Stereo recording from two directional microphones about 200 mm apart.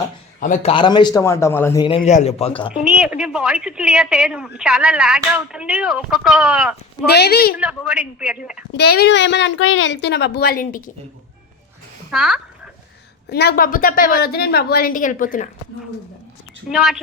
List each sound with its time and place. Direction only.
0.3 s a man's voice: 40° left (ahead or behind)
0.7 s a man's voice: 25° left (ahead or behind)
2.0 s speech: 35° left (ahead or behind)
2.7 s a woman's voice: 5° right (ahead or behind)
7.0 s a woman's voice: 55° left (ahead or behind)
7.5 s a woman's voice: 5° right (ahead or behind)
8.7 s a woman's voice: 55° left (ahead or behind)
12.1 s a woman's voice: centre (ahead or behind)
13.3 s a woman's voice: 50° left (ahead or behind)
16.6 s a woman's voice: centre (ahead or behind)